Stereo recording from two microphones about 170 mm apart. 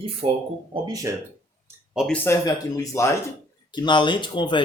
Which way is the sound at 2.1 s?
20° left (ahead or behind).